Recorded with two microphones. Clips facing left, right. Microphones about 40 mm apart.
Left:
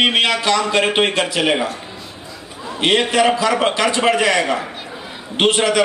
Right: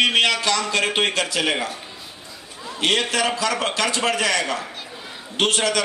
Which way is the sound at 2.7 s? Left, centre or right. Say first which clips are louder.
Left 5 dB; left.